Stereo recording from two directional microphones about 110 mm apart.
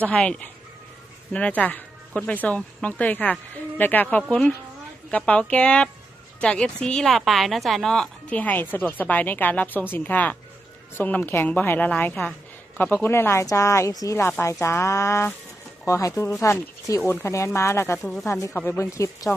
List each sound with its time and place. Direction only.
0.0 s a woman's voice: 10° left (ahead or behind); by 19.3 s 30° left (ahead or behind)